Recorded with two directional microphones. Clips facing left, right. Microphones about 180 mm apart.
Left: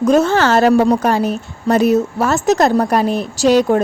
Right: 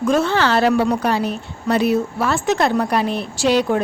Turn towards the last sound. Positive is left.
turn(degrees=45)  # may be behind; listen again after turning